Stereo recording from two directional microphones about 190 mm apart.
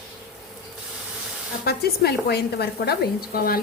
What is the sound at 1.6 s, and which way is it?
A woman's voice, 55° left (ahead or behind).